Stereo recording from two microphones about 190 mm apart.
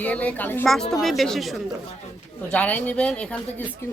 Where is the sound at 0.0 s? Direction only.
5° left (ahead or behind).